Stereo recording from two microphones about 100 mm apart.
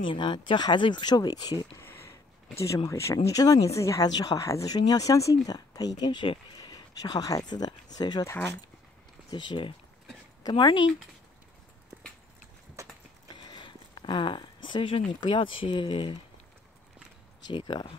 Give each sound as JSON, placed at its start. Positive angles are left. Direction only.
{"t": 0.1, "sound": "speech", "side_deg": 55}
{"t": 1.8, "sound": "a sound", "side_deg": 25}
{"t": 2.9, "sound": "speech", "side_deg": 30}
{"t": 9.3, "sound": "speech", "side_deg": 50}
{"t": 13.5, "sound": "speech", "side_deg": 50}
{"t": 17.5, "sound": "speech", "side_deg": 50}